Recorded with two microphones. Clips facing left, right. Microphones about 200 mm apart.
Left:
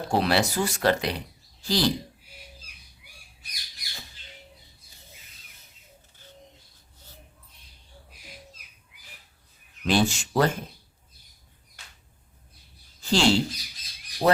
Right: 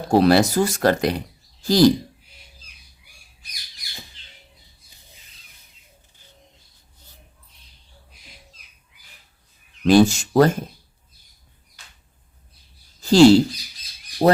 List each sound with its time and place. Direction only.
0.1 s speech: 40° right (ahead or behind)
9.8 s speech: 40° right (ahead or behind)
13.0 s speech: 40° right (ahead or behind)